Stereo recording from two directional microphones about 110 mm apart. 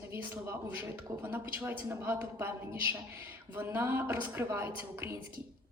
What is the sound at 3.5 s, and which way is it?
A man's voice, 15° right (ahead or behind).